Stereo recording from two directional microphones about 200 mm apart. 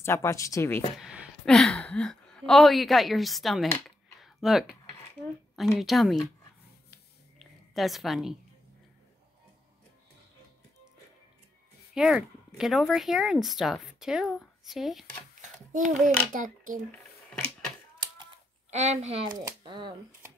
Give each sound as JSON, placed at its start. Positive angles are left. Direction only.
{"t": 0.0, "sound": "speech", "side_deg": 15}
{"t": 0.9, "sound": "a woman's voice", "side_deg": -5}
{"t": 5.8, "sound": "speech", "side_deg": 0}
{"t": 7.3, "sound": "a sound", "side_deg": 0}
{"t": 11.9, "sound": "speech", "side_deg": -5}
{"t": 15.4, "sound": "a sound", "side_deg": -40}
{"t": 16.3, "sound": "speech", "side_deg": -40}
{"t": 17.9, "sound": "typing", "side_deg": -25}
{"t": 18.8, "sound": "speech", "side_deg": -35}